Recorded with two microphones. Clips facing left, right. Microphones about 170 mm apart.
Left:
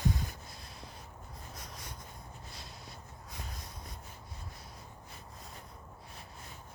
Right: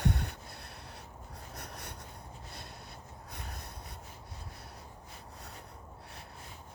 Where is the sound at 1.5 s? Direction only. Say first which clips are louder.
Right 4 dB; 60° right (ahead or behind).